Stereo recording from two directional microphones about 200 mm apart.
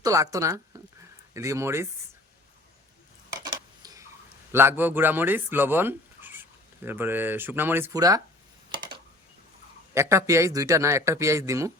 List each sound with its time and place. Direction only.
0.0 s a man's voice: 15° right (ahead or behind)
3.4 s a sound: 20° right (ahead or behind)
4.5 s speech: 10° right (ahead or behind)
9.9 s a man's voice: 15° right (ahead or behind)